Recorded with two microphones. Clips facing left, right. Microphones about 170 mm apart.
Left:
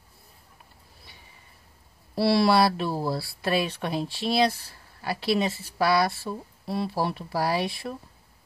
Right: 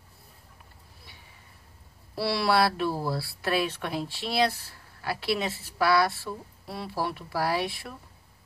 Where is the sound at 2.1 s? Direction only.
20° left (ahead or behind).